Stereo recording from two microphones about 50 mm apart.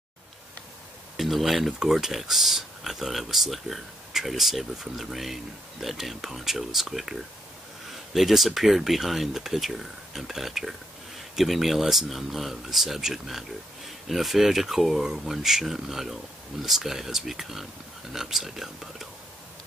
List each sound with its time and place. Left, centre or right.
1.1 s speech: centre